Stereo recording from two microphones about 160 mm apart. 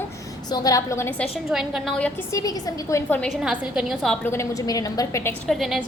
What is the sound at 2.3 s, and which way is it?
Speech, 20° left (ahead or behind).